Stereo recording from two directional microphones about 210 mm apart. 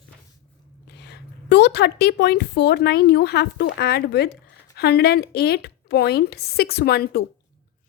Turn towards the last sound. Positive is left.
turn(degrees=50)  # may be behind; listen again after turning